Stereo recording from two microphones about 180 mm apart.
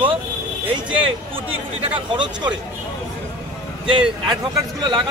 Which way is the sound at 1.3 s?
30° right (ahead or behind).